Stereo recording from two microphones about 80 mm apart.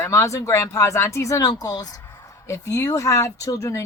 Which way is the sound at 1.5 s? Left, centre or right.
Left.